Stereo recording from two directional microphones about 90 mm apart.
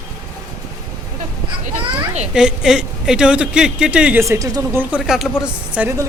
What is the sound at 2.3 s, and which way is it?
Speech, 10° right (ahead or behind).